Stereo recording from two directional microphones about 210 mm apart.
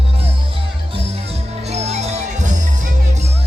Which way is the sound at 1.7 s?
30° right (ahead or behind).